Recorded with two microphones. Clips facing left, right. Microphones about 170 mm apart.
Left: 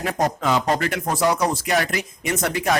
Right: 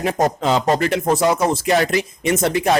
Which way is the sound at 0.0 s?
25° right (ahead or behind).